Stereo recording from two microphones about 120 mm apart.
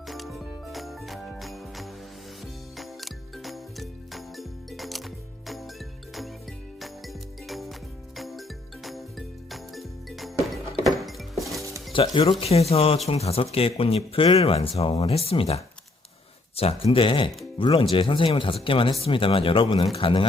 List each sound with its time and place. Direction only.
0.1 s music: centre (ahead or behind)
6.7 s music: centre (ahead or behind)
11.9 s speech: 45° left (ahead or behind)